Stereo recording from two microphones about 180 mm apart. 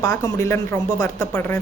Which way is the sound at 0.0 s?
20° left (ahead or behind).